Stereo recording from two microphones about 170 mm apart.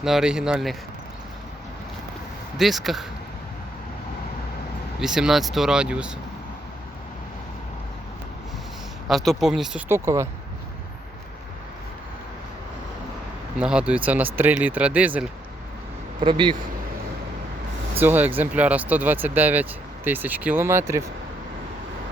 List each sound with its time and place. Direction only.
0.0 s speech: 5° right (ahead or behind)
2.6 s speech: centre (ahead or behind)
4.9 s speech: 5° right (ahead or behind)
9.0 s speech: centre (ahead or behind); by 10.2 s 15° right (ahead or behind)
13.6 s speech: 5° right (ahead or behind)
16.2 s speech: 30° right (ahead or behind)
18.0 s speech: 10° right (ahead or behind)